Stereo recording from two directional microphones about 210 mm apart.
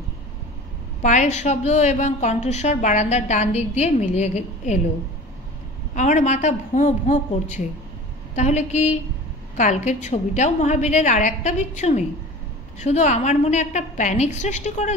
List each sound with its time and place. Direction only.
1.0 s a woman's voice: 35° left (ahead or behind)
5.9 s a woman's voice: 35° left (ahead or behind)